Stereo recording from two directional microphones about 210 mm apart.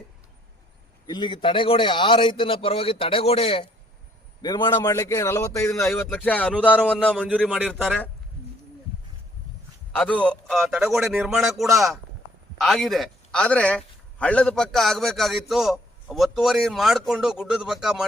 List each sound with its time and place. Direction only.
1.0 s a man's voice: 20° left (ahead or behind); by 8.1 s centre (ahead or behind)
9.9 s a man's voice: 5° left (ahead or behind)